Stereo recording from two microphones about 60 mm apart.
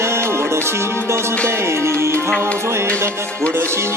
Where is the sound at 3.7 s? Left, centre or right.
Right.